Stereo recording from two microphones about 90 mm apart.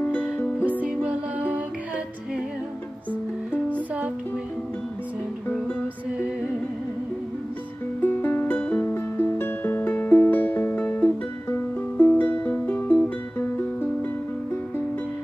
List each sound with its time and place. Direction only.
0.7 s music: 15° right (ahead or behind)
3.1 s music: 15° left (ahead or behind)
8.0 s music: 25° left (ahead or behind)